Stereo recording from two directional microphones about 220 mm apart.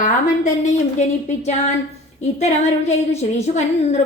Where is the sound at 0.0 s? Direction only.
35° left (ahead or behind).